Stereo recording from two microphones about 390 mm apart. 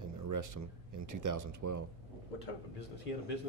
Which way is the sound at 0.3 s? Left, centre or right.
Right.